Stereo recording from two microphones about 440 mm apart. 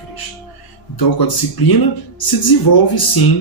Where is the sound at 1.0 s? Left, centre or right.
Left.